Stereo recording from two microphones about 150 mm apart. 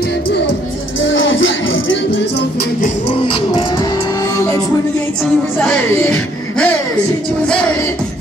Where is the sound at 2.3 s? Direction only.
90° left.